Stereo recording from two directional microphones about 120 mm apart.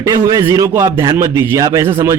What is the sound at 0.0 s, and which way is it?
A man's voice, 25° right (ahead or behind).